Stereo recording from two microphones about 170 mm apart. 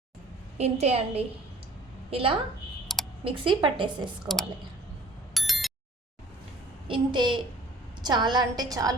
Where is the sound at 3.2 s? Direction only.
30° right (ahead or behind).